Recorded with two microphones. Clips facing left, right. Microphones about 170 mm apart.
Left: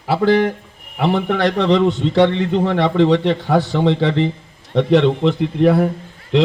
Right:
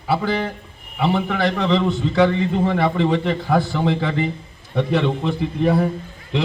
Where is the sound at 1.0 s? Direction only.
65° left (ahead or behind).